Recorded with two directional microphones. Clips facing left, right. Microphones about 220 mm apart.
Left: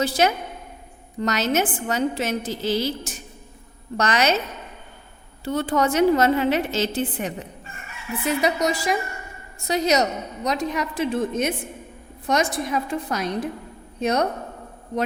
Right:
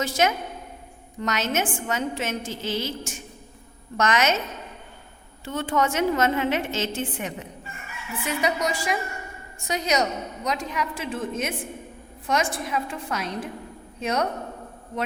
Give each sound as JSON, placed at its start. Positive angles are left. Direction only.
{"t": 0.0, "sound": "a woman's voice", "side_deg": 35}
{"t": 5.5, "sound": "a woman's voice", "side_deg": 35}